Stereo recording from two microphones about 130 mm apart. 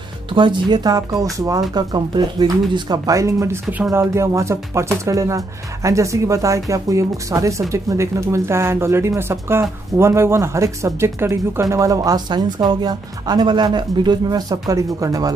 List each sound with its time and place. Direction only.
0.3 s speech: 35° right (ahead or behind)